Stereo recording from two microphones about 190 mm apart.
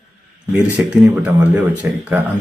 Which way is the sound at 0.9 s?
10° right (ahead or behind).